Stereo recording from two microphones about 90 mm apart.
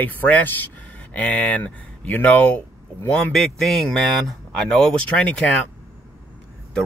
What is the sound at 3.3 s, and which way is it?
Speech, centre (ahead or behind).